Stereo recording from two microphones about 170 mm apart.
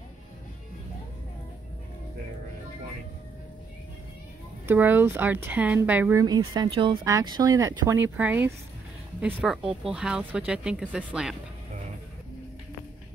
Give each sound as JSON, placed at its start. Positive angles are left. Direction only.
{"t": 4.6, "sound": "speech", "side_deg": -10}
{"t": 6.2, "sound": "speech", "side_deg": -25}